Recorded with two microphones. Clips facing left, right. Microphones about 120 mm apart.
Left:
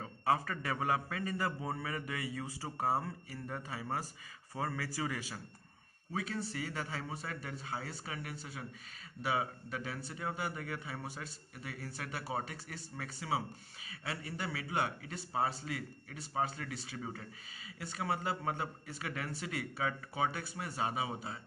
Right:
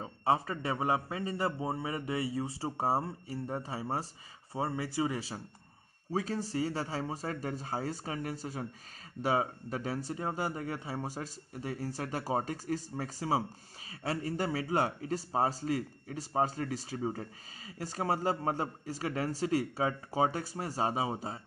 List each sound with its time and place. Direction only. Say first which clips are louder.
0.0 s a man's voice: right 3 dB; 25° right (ahead or behind)